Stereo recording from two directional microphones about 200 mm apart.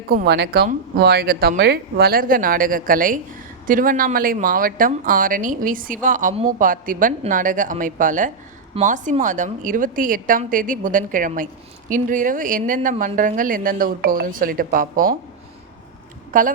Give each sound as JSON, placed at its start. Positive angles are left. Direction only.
{"t": 0.1, "sound": "a woman's voice", "side_deg": -55}
{"t": 16.3, "sound": "a woman's voice", "side_deg": -40}